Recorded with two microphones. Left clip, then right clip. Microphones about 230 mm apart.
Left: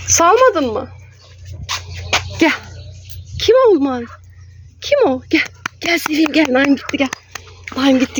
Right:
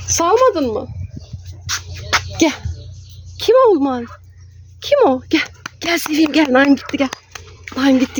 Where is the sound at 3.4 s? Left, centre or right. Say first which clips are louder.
Left 1 dB; centre.